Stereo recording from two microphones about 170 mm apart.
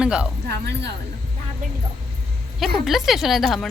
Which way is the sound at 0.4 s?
80° right.